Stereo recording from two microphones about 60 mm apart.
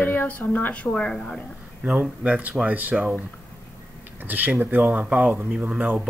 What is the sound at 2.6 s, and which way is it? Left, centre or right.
Speech, right.